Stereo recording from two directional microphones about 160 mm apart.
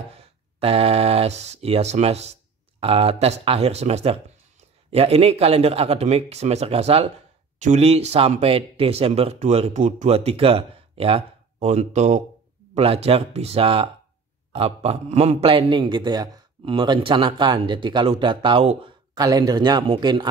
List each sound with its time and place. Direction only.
0.2 s speech: 40° right (ahead or behind)
19.1 s speech: 25° right (ahead or behind)